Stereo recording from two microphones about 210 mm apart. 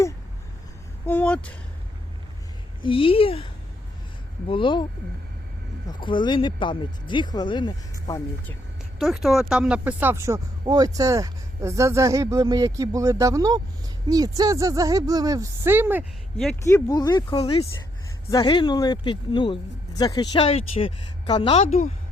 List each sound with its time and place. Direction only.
1.0 s speech: 5° left (ahead or behind)
2.8 s a woman's voice: 25° left (ahead or behind)
5.9 s a woman's voice: 20° left (ahead or behind)
9.0 s speech: centre (ahead or behind)
16.6 s a woman's voice: 15° left (ahead or behind); by 21.9 s 35° left (ahead or behind)